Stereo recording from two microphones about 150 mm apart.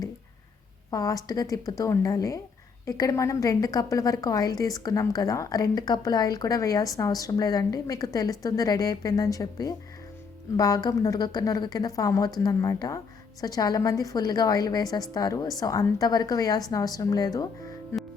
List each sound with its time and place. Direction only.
0.9 s a woman's voice: 25° left (ahead or behind)